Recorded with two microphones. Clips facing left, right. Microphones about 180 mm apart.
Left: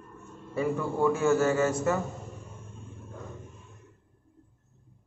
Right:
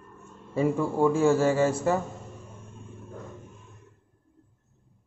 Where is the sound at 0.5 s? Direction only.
25° right (ahead or behind).